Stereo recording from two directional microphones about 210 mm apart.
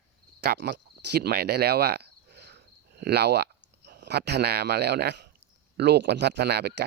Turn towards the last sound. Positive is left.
turn(degrees=-50)  # may be behind; listen again after turning